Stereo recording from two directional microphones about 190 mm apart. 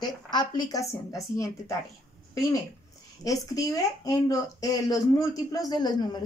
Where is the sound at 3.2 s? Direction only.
20° left (ahead or behind).